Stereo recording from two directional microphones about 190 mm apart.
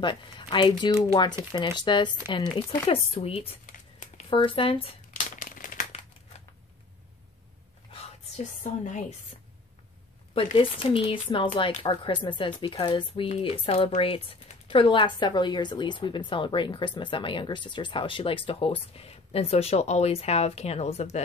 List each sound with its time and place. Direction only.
0.0 s speech: 25° left (ahead or behind)
3.6 s a sound: 40° left (ahead or behind)
4.3 s crumpling: 30° left (ahead or behind); by 5.9 s 45° left (ahead or behind)
8.6 s speech: 35° left (ahead or behind)
10.3 s speech: 30° left (ahead or behind)